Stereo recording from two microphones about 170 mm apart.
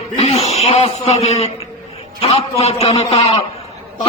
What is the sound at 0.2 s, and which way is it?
A man's voice, 40° left (ahead or behind).